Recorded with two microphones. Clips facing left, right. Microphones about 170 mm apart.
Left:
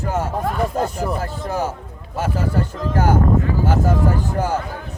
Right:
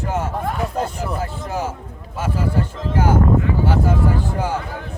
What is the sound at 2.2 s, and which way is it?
Speech, 40° left (ahead or behind).